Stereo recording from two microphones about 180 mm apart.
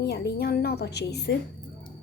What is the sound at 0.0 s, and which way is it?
A woman's voice, 60° left (ahead or behind).